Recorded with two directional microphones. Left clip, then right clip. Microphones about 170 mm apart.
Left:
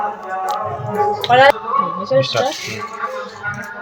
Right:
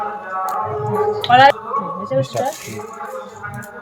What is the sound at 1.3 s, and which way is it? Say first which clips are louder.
Speech: even; 40° left (ahead or behind).